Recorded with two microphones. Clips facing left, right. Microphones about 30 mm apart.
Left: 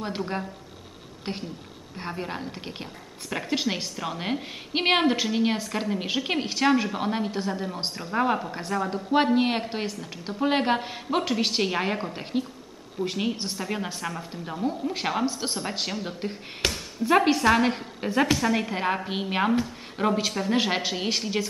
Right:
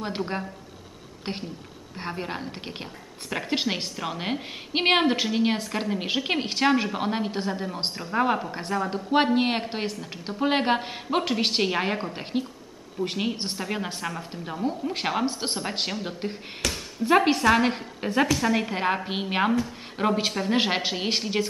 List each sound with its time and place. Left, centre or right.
0.0 s a woman's voice: centre
8.0 s speech: centre
8.5 s a woman's voice: centre
15.2 s speech: right
15.9 s a woman's voice: centre
16.6 s speech: left
17.0 s a woman's voice: centre